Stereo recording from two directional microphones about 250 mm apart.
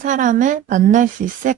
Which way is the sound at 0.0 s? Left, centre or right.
Right.